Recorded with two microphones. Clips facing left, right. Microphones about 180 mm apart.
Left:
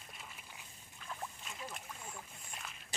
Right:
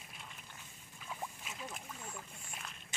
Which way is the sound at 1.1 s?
5° right (ahead or behind).